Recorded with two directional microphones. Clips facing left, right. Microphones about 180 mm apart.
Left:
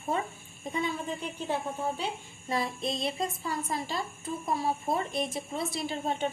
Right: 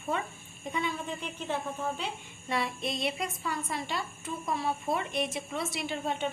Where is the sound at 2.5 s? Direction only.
35° left (ahead or behind).